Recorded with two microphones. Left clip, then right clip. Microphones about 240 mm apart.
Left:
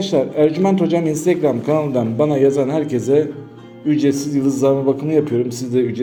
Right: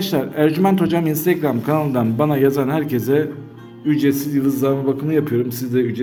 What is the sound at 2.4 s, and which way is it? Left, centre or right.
A man's voice, right.